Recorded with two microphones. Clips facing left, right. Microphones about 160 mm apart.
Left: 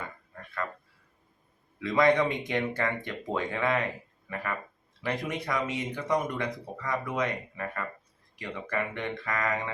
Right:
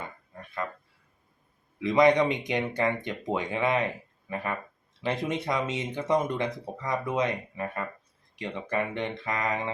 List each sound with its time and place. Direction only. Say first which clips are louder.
1.8 s speech: right 3 dB; 20° right (ahead or behind)
5.0 s speech: right 3 dB; 25° right (ahead or behind)